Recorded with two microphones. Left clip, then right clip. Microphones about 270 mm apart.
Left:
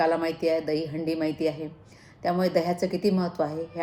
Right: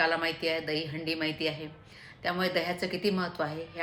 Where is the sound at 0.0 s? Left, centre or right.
Right.